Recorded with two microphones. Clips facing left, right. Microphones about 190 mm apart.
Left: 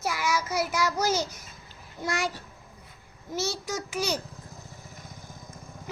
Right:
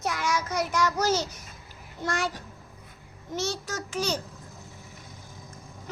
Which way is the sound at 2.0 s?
10° left (ahead or behind).